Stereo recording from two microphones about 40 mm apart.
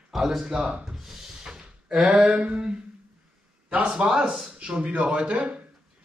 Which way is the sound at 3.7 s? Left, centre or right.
Right.